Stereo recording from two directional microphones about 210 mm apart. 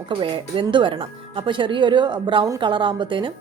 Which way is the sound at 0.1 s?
25° right (ahead or behind).